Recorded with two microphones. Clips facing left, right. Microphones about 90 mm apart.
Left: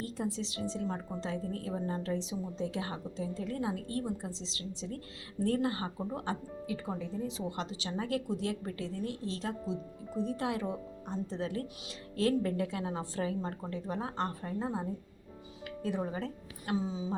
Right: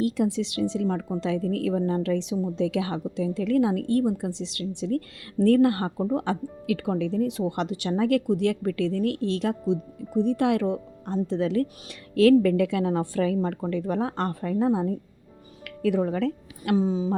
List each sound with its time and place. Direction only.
0.0 s speech: 75° right (ahead or behind)
16.7 s speech: 45° right (ahead or behind)